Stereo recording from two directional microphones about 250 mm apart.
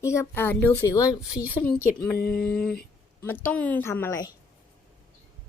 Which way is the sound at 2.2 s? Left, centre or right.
Left.